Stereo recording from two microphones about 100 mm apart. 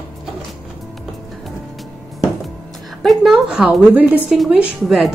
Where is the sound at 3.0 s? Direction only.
Centre (ahead or behind).